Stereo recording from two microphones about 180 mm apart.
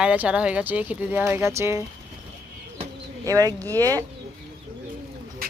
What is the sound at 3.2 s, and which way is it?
Speech, 20° right (ahead or behind).